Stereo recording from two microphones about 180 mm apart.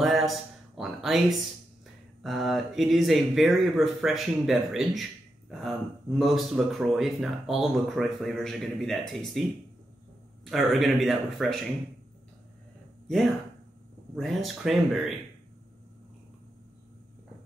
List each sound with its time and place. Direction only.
0.0 s a sound: centre (ahead or behind)
2.2 s speech: centre (ahead or behind)
14.1 s speech: centre (ahead or behind)